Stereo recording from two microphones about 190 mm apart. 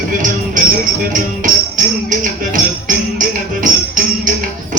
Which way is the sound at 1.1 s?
40° right (ahead or behind).